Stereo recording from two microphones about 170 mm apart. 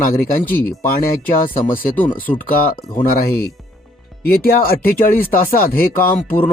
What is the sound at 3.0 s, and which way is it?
Speech, 60° left (ahead or behind).